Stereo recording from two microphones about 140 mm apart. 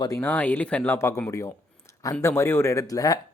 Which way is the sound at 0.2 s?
10° left (ahead or behind).